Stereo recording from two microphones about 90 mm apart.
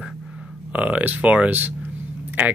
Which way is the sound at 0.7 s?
15° right (ahead or behind).